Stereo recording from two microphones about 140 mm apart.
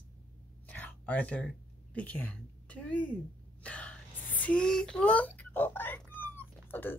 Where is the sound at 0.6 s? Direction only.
10° left (ahead or behind).